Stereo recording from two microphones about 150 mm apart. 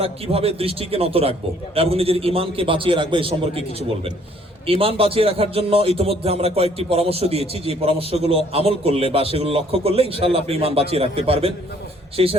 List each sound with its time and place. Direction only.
0.0 s a man's voice: 40° right (ahead or behind)
3.5 s speech: 45° left (ahead or behind)
4.6 s a man's voice: 40° right (ahead or behind)